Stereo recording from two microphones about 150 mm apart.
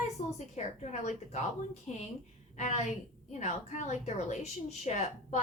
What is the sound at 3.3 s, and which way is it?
A woman's voice, 50° left (ahead or behind).